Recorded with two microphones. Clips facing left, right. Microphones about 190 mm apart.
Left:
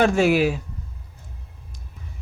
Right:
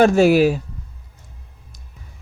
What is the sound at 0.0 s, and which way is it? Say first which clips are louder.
Speech: right 5 dB; 40° right (ahead or behind).